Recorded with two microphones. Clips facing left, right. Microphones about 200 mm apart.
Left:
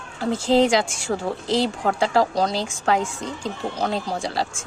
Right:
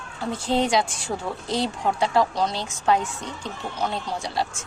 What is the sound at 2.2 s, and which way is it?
A woman's voice, 35° left (ahead or behind).